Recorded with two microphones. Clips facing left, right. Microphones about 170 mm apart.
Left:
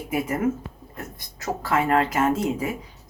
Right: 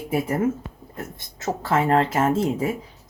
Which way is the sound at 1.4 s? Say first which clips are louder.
Right 2 dB; 25° right (ahead or behind).